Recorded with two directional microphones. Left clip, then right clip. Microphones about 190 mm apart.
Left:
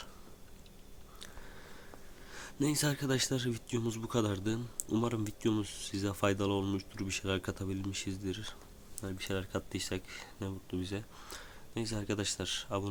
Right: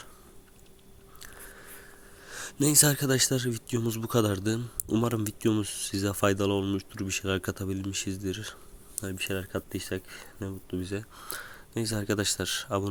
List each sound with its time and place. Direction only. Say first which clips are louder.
2.2 s speech: right 6 dB; 35° right (ahead or behind)